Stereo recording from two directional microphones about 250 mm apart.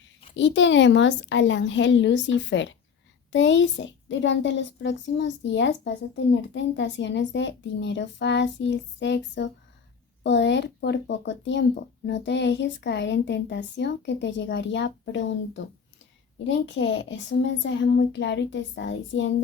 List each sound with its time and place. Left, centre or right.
0.3 s a child's voice: left